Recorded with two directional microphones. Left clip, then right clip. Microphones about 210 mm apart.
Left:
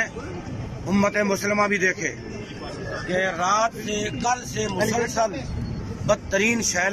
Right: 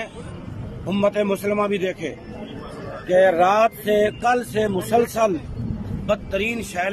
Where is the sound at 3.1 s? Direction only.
40° right (ahead or behind).